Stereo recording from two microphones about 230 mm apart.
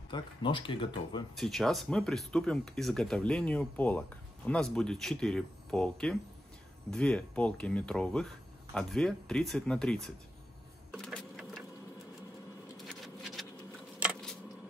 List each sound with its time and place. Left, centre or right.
0.1 s speech: left
1.3 s speech: centre
10.9 s vehicle: centre
12.7 s a sound: centre